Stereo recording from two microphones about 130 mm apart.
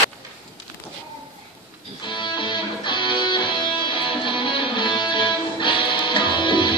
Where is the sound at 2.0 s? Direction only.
40° left (ahead or behind).